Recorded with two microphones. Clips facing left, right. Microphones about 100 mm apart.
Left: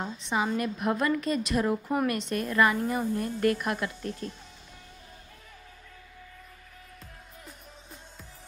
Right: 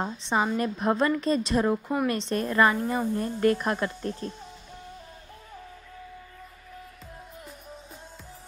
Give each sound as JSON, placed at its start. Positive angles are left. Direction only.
{"t": 0.0, "sound": "a woman's voice", "side_deg": -30}